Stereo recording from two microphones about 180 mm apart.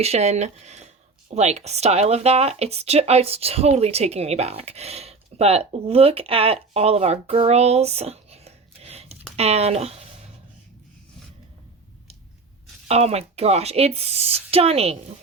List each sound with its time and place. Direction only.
0.0 s speech: 35° right (ahead or behind)
12.9 s speech: 35° right (ahead or behind)